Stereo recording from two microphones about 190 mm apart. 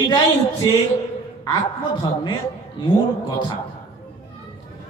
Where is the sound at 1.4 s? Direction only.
20° left (ahead or behind).